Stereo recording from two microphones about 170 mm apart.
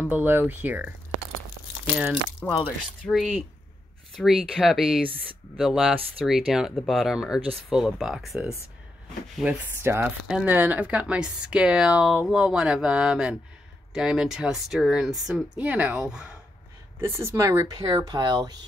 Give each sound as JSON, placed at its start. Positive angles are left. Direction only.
{"t": 0.0, "sound": "speech", "side_deg": -10}
{"t": 2.4, "sound": "speech", "side_deg": 0}
{"t": 17.0, "sound": "speech", "side_deg": -15}